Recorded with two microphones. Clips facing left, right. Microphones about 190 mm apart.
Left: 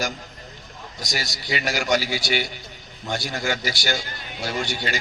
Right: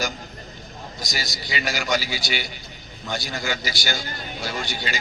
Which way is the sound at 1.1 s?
60° left (ahead or behind).